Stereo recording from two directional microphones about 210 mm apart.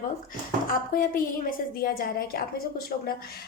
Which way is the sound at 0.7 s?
40° left (ahead or behind).